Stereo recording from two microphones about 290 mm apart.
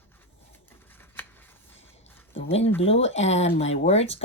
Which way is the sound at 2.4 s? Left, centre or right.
Left.